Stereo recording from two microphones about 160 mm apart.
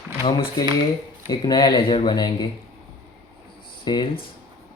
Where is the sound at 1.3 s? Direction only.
25° left (ahead or behind).